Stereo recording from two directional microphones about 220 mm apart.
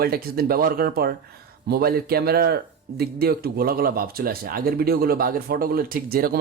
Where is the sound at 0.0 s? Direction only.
45° right (ahead or behind).